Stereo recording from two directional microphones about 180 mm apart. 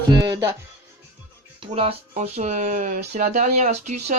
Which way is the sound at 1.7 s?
35° right (ahead or behind).